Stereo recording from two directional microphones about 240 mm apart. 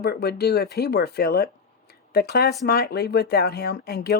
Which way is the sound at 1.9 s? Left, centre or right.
Left.